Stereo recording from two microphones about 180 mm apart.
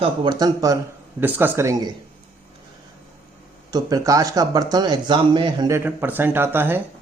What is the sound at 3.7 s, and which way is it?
Speech, 20° right (ahead or behind).